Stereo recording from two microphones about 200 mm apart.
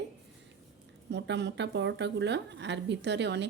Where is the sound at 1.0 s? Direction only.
60° right (ahead or behind).